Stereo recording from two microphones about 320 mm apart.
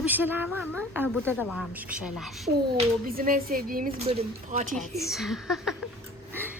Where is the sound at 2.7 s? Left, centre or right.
Right.